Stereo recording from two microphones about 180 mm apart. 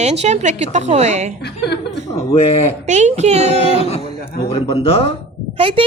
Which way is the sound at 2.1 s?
35° left (ahead or behind).